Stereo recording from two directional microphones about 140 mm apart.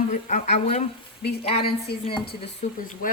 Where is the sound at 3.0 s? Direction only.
80° left.